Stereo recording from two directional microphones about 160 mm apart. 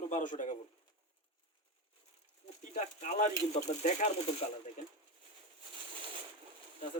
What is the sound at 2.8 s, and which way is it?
Speech, 50° left (ahead or behind).